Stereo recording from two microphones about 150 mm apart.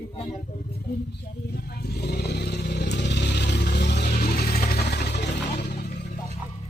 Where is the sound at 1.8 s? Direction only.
90° left.